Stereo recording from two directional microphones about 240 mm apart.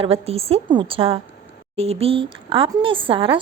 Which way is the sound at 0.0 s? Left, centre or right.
Right.